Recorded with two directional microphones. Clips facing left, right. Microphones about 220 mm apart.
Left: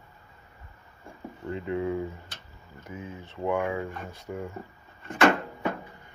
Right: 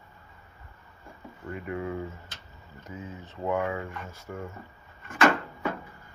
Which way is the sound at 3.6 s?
25° left (ahead or behind).